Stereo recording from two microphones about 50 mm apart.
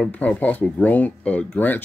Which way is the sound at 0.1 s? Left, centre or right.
Left.